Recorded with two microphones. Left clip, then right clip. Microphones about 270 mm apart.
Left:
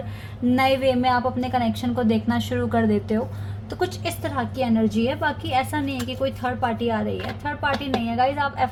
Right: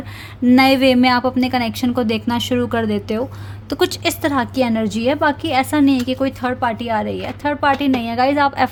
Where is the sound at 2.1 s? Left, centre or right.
Right.